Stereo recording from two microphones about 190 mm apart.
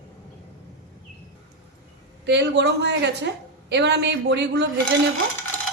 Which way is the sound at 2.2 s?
65° right (ahead or behind).